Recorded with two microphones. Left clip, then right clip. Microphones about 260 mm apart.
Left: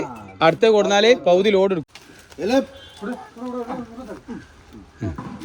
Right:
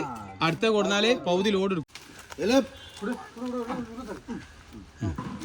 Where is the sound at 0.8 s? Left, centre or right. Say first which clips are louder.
Left 9 dB; centre.